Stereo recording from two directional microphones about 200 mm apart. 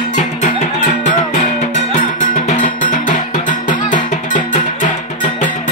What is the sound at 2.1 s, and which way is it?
Music, 40° left (ahead or behind).